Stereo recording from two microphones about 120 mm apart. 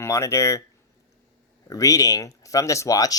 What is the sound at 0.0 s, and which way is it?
Speech, 25° left (ahead or behind).